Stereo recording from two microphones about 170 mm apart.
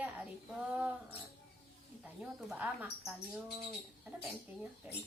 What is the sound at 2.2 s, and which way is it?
A woman's voice, 10° right (ahead or behind).